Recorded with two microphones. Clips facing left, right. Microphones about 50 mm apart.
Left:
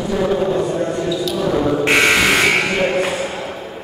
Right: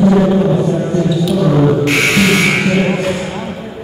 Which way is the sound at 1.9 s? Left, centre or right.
Centre.